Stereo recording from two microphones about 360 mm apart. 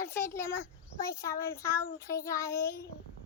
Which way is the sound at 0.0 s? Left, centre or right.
Centre.